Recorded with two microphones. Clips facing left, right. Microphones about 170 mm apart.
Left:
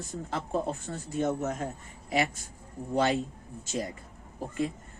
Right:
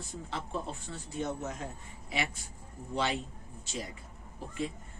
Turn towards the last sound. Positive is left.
turn(degrees=45)  # may be behind; listen again after turning